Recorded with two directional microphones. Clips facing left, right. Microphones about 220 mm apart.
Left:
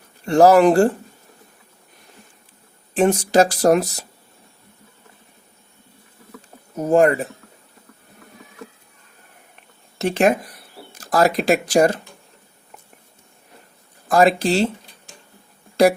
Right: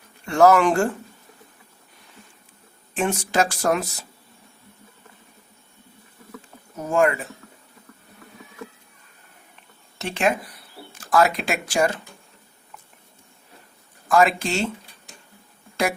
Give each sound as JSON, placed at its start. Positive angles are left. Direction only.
{"t": 0.3, "sound": "speech", "side_deg": 35}
{"t": 2.9, "sound": "speech", "side_deg": 35}
{"t": 6.7, "sound": "speech", "side_deg": 40}
{"t": 10.0, "sound": "speech", "side_deg": 40}
{"t": 14.1, "sound": "speech", "side_deg": 35}
{"t": 15.8, "sound": "speech", "side_deg": 35}